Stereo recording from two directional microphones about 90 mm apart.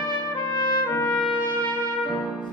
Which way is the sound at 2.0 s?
15° right (ahead or behind).